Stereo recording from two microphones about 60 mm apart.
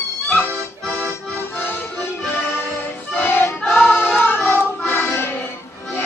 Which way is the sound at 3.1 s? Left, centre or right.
Left.